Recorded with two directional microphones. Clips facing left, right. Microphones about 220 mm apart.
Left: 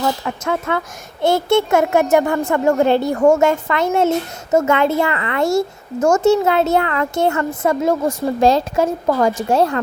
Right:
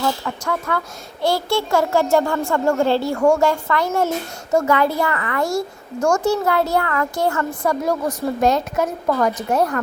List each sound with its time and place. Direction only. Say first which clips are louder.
0.3 s speech: left 3 dB; 20° left (ahead or behind)